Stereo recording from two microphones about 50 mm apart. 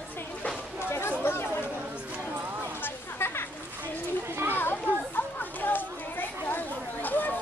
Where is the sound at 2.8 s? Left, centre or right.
Left.